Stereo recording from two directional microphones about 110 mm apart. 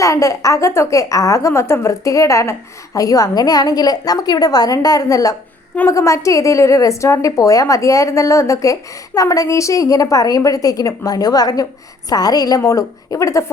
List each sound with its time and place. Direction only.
0.0 s a woman's voice: 30° left (ahead or behind)